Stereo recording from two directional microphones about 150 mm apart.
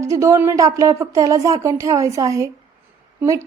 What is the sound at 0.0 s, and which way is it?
A woman's voice, 20° right (ahead or behind).